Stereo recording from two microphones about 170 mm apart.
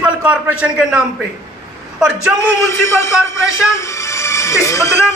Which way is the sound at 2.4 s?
15° left (ahead or behind).